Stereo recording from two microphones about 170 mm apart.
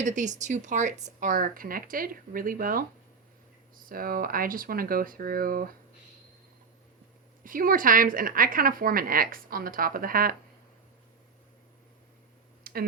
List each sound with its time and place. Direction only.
0.0 s a woman's voice: 45° right (ahead or behind)
7.4 s a woman's voice: 55° right (ahead or behind)
12.7 s a sound: 60° right (ahead or behind)